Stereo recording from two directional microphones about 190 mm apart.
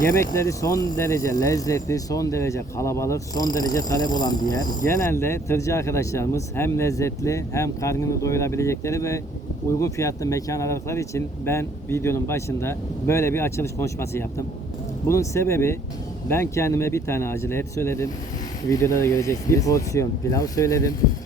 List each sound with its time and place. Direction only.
0.0 s a man's voice: 15° left (ahead or behind)